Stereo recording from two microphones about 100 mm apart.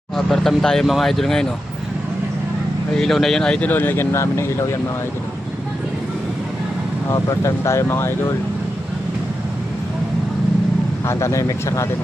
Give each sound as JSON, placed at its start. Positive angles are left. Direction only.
{"t": 0.3, "sound": "speech", "side_deg": 5}
{"t": 3.0, "sound": "speech", "side_deg": 5}
{"t": 3.7, "sound": "speech", "side_deg": 20}
{"t": 7.1, "sound": "speech", "side_deg": 30}
{"t": 11.0, "sound": "speech", "side_deg": 25}